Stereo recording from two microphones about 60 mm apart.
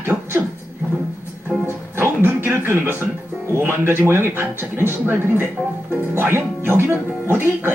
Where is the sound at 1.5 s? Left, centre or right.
Centre.